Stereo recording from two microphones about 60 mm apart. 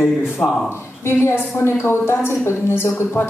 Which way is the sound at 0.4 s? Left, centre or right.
Centre.